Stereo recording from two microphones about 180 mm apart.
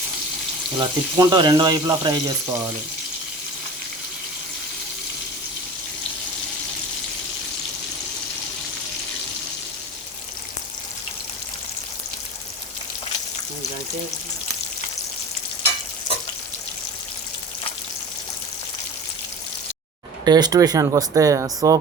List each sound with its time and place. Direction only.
0.8 s speech: 20° right (ahead or behind)
20.2 s speech: 20° right (ahead or behind)